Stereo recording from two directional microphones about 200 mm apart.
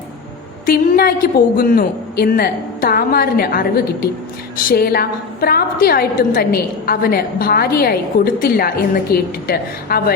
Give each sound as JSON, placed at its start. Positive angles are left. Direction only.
{"t": 0.6, "sound": "a woman's voice", "side_deg": 50}